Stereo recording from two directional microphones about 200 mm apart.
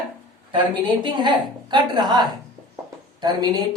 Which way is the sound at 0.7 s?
25° right (ahead or behind).